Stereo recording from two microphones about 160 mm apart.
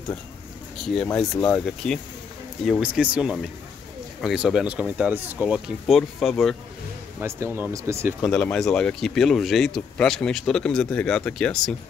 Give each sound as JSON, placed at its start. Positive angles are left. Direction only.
{"t": 0.9, "sound": "speech", "side_deg": 0}
{"t": 2.8, "sound": "speech", "side_deg": -5}
{"t": 7.2, "sound": "speech", "side_deg": -15}
{"t": 8.2, "sound": "speech", "side_deg": 5}